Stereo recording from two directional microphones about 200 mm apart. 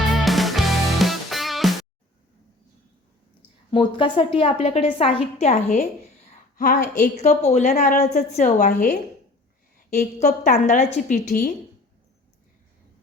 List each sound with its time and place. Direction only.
0.1 s music: centre (ahead or behind)
3.7 s a woman's voice: 25° left (ahead or behind); by 9.0 s 40° left (ahead or behind)
10.0 s a woman's voice: 40° left (ahead or behind)
11.3 s a woman's voice: 45° left (ahead or behind)